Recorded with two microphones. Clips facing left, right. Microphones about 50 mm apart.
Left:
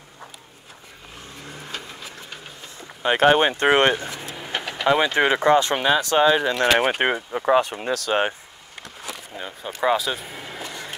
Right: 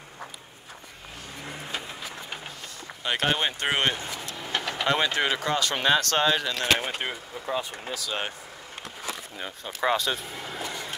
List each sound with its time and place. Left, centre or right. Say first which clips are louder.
3.0 s speech: left 9 dB; left
4.3 s vehicle: even; centre
4.8 s speech: left 6 dB; centre
5.1 s speech: left 9 dB; left
5.8 s speech: left 4 dB; centre
6.8 s speech: left 11 dB; left
7.3 s speech: left 12 dB; left
9.4 s speech: left 5 dB; centre